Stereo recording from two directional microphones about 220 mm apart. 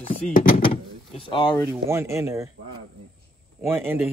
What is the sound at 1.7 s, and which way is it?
Speech, 10° right (ahead or behind).